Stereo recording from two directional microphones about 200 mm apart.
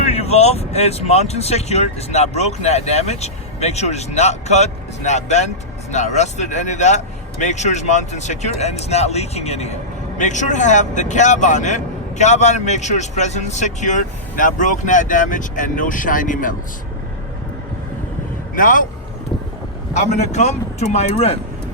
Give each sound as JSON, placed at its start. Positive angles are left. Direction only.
{"t": 0.0, "sound": "speech", "side_deg": 30}
{"t": 18.5, "sound": "speech", "side_deg": 40}
{"t": 19.9, "sound": "speech", "side_deg": 35}